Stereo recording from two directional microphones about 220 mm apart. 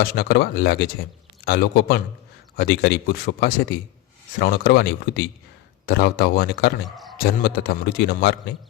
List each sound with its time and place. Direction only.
0.0 s a man's voice: 45° left (ahead or behind)
6.9 s bleat: centre (ahead or behind)
7.2 s a man's voice: 45° left (ahead or behind)